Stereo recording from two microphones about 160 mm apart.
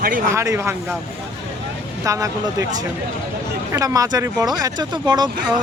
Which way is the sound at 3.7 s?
20° right (ahead or behind).